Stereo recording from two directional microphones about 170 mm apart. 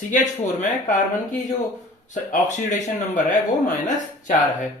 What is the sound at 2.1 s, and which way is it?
Speech, 45° left (ahead or behind).